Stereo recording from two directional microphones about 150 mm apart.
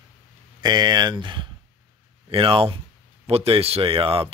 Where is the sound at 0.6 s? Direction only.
30° right (ahead or behind).